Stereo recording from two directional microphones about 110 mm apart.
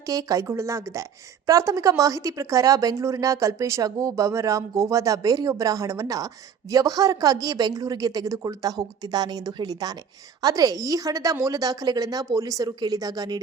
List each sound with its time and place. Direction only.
0.0 s a woman's voice: 30° right (ahead or behind)